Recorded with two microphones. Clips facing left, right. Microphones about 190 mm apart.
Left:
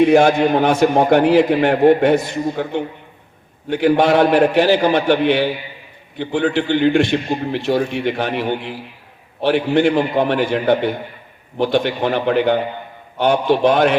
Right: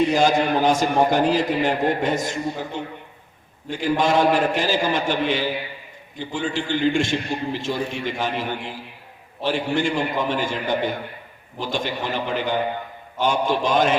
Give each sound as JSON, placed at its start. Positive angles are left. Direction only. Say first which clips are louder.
{"t": 0.0, "sound": "a man's voice", "louder": "left 6 dB", "side_deg": 65}